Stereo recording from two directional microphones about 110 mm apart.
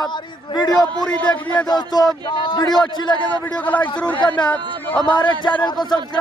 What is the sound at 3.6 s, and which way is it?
Speech, 15° left (ahead or behind).